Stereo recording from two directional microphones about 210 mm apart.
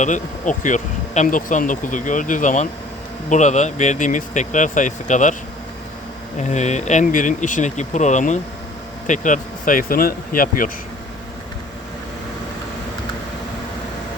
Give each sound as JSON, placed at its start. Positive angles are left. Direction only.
{"t": 0.0, "sound": "speech", "side_deg": 35}
{"t": 6.5, "sound": "speech", "side_deg": 35}